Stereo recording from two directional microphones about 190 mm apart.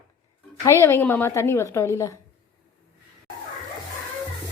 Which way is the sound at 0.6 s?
15° left (ahead or behind).